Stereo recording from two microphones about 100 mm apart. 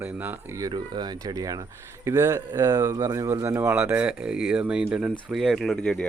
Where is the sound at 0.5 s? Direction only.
40° right (ahead or behind).